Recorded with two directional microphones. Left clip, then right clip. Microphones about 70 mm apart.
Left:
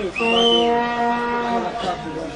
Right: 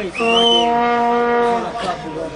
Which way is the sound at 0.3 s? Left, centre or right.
Right.